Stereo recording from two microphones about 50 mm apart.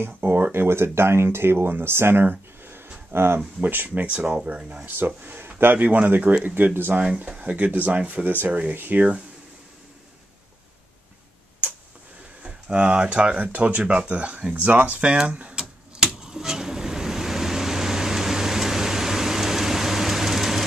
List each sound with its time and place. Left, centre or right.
0.0 s speech: right
0.5 s speech: right
2.2 s a sound: right
3.1 s speech: right
3.3 s speech: right
4.3 s speech: right
4.8 s speech: right
7.0 s speech: right
12.4 s speech: right
16.1 s vehicle: centre